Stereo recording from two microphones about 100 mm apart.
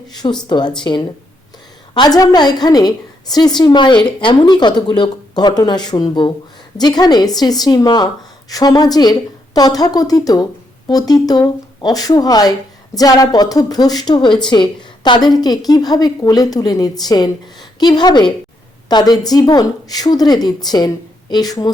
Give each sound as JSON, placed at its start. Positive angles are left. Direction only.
{"t": 0.1, "sound": "a woman's voice", "side_deg": 45}